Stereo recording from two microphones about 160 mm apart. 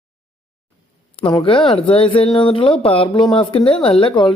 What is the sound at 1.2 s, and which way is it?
Speech, 30° left (ahead or behind).